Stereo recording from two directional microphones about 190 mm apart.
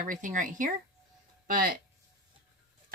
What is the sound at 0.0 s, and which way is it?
Speech, 40° right (ahead or behind).